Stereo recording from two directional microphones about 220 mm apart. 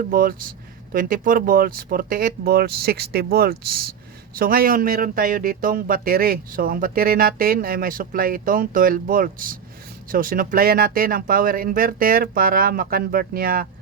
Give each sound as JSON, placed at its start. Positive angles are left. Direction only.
{"t": 0.1, "sound": "speech", "side_deg": -40}